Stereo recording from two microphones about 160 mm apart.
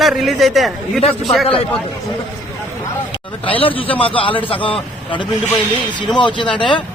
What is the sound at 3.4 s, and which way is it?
Speech, 35° left (ahead or behind).